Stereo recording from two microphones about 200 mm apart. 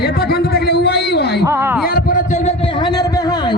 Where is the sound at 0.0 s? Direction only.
55° left (ahead or behind).